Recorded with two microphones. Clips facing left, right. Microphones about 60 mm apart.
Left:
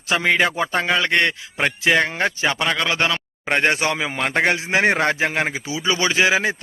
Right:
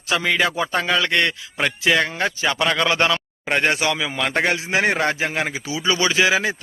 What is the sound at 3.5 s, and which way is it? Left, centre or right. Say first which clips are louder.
A man's voice: left 1 dB; left.